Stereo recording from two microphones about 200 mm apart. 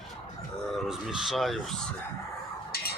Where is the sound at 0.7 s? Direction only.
Centre (ahead or behind).